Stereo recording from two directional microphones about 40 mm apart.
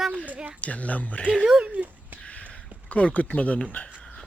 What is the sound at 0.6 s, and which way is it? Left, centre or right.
Speech, left.